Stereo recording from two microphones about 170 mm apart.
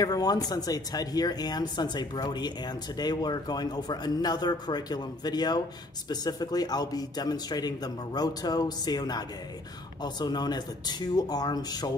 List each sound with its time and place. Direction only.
0.0 s speech: 25° left (ahead or behind)